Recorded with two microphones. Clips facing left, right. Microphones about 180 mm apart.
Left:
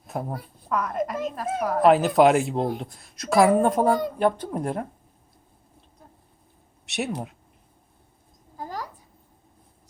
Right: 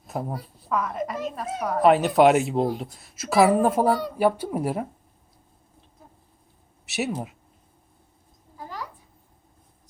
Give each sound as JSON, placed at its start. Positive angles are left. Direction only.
{"t": 0.1, "sound": "a woman's voice", "side_deg": 0}
{"t": 6.8, "sound": "speech", "side_deg": 0}
{"t": 8.5, "sound": "a sound", "side_deg": 45}